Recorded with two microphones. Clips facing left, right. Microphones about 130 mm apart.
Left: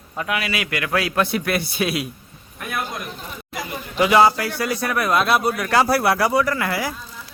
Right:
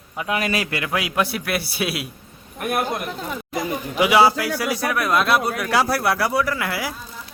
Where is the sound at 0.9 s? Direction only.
15° right (ahead or behind).